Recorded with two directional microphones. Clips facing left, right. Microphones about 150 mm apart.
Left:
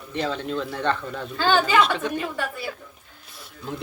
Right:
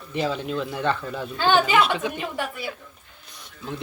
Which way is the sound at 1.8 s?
5° right (ahead or behind).